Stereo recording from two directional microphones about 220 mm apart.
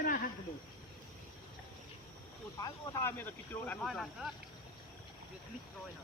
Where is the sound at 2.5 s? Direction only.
15° left (ahead or behind).